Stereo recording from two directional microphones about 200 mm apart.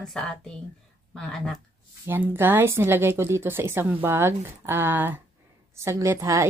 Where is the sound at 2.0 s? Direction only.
10° right (ahead or behind).